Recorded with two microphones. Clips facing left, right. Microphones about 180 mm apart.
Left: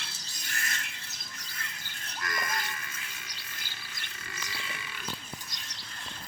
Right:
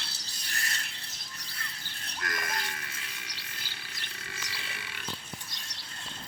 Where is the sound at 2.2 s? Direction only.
70° right (ahead or behind).